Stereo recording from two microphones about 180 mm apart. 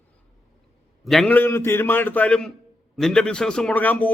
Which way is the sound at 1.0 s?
Centre (ahead or behind).